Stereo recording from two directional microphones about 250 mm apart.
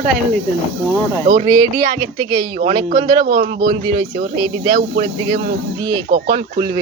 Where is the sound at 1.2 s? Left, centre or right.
Right.